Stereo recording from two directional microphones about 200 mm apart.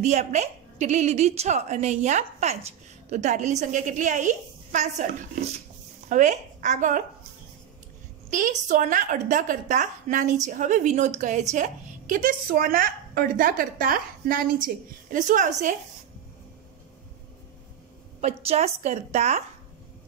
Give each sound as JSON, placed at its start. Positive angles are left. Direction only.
{"t": 0.0, "sound": "a woman's voice", "side_deg": -35}
{"t": 6.0, "sound": "speech", "side_deg": -40}
{"t": 8.3, "sound": "a woman's voice", "side_deg": -40}
{"t": 18.2, "sound": "a woman's voice", "side_deg": -35}